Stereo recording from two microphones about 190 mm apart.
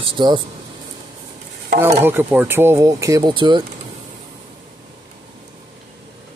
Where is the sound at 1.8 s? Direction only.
10° right (ahead or behind).